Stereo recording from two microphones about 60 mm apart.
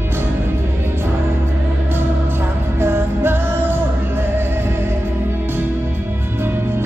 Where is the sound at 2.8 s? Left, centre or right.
Right.